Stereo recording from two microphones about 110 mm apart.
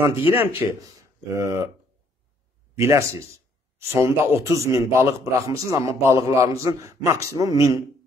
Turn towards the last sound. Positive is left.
turn(degrees=-30)  # may be behind; listen again after turning